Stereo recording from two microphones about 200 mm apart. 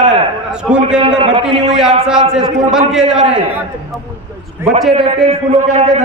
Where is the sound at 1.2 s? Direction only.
30° right (ahead or behind).